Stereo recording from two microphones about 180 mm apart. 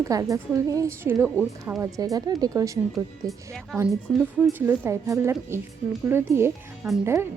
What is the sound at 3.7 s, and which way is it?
A woman's voice, 10° right (ahead or behind).